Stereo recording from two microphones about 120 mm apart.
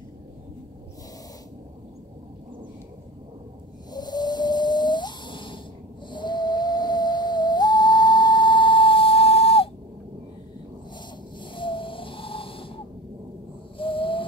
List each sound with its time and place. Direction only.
3.9 s whale vocalization: 35° left (ahead or behind)
6.0 s whistle: 40° left (ahead or behind)
11.5 s a sound: 45° left (ahead or behind)
13.7 s owl: 45° left (ahead or behind)